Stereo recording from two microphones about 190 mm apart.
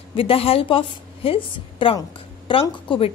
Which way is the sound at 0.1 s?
30° left (ahead or behind).